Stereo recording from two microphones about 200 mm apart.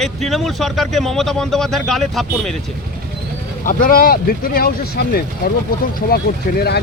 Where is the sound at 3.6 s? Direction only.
45° left (ahead or behind).